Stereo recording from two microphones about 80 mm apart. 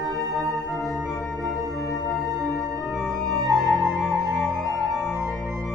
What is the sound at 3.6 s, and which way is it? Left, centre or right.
Music, centre.